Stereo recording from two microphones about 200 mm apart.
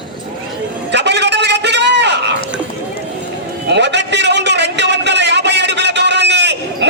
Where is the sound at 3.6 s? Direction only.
60° right (ahead or behind).